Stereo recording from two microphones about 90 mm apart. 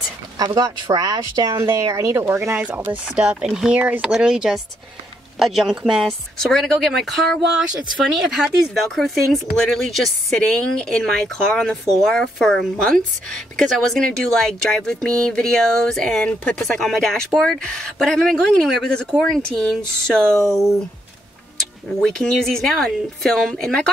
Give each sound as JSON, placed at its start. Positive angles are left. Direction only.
{"t": 0.6, "sound": "speech", "side_deg": -40}
{"t": 1.6, "sound": "speech", "side_deg": -35}
{"t": 2.5, "sound": "a woman's voice", "side_deg": -15}
{"t": 20.4, "sound": "speech", "side_deg": -5}